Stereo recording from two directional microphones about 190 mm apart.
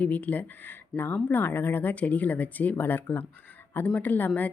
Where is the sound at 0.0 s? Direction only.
10° left (ahead or behind).